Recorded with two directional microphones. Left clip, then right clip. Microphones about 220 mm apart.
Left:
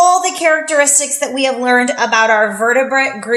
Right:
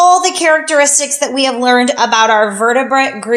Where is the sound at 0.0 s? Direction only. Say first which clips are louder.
Right 2 dB; 40° right (ahead or behind).